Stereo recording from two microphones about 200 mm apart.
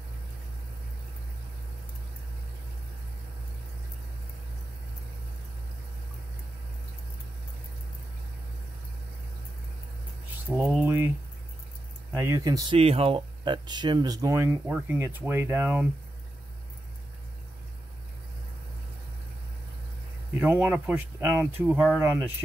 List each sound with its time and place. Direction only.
10.6 s speech: 10° right (ahead or behind)
12.1 s speech: 15° right (ahead or behind)
12.7 s speech: 30° right (ahead or behind); by 15.9 s 10° right (ahead or behind)
20.3 s speech: 10° right (ahead or behind)